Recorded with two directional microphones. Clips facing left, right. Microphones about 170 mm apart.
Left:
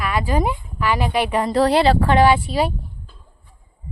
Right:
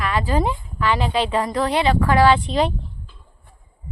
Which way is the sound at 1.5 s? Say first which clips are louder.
Left 4 dB; 35° left (ahead or behind).